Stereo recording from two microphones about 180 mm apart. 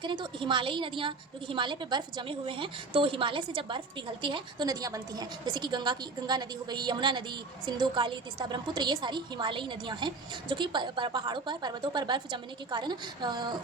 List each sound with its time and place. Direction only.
0.0 s a woman's voice: 25° right (ahead or behind)